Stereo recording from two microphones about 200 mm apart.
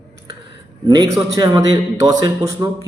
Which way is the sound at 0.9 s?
20° right (ahead or behind).